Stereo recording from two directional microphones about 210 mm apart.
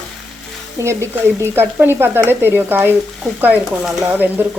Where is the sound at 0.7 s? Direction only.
15° right (ahead or behind).